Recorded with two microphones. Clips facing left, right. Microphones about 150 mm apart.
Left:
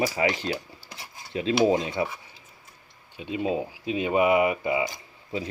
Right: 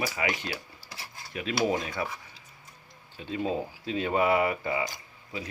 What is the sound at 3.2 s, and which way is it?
Speech, 15° left (ahead or behind).